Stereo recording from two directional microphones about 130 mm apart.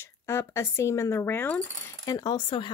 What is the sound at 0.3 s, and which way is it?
Speech, 20° left (ahead or behind).